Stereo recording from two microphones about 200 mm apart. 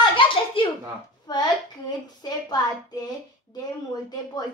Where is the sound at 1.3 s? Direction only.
20° left (ahead or behind).